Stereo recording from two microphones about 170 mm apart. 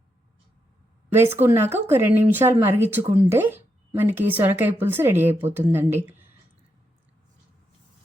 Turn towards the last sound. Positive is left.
turn(degrees=-15)  # may be behind; listen again after turning